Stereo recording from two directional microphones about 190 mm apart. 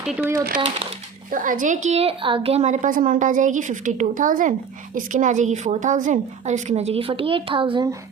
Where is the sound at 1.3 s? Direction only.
45° right (ahead or behind); by 7.9 s 25° right (ahead or behind).